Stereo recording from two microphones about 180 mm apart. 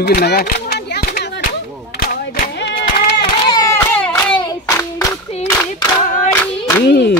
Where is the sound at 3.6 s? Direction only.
10° left (ahead or behind).